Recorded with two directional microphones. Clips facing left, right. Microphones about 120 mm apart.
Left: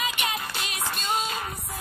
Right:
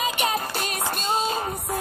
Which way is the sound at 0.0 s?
40° right (ahead or behind).